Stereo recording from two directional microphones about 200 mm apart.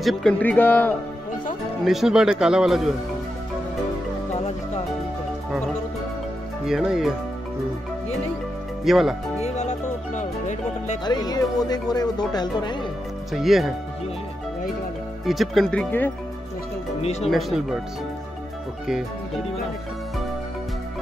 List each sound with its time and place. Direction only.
0.0 s speech: centre (ahead or behind)
1.9 s a man's voice: centre (ahead or behind)
6.6 s a man's voice: centre (ahead or behind)
8.8 s speech: centre (ahead or behind)
9.4 s music: 35° left (ahead or behind)
11.1 s speech: 20° left (ahead or behind)
13.3 s a man's voice: centre (ahead or behind)
15.2 s a man's voice: centre (ahead or behind)
17.0 s speech: 30° left (ahead or behind)
17.3 s a man's voice: centre (ahead or behind)